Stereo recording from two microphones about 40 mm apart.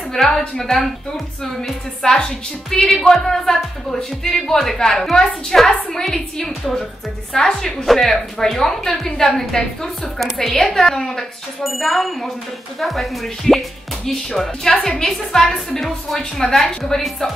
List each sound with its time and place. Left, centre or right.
0.1 s a woman's voice: centre
11.6 s a woman's voice: centre